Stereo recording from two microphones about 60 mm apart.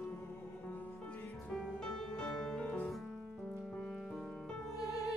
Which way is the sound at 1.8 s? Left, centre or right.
Centre.